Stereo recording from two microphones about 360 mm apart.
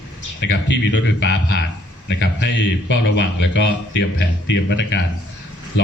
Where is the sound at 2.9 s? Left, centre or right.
Left.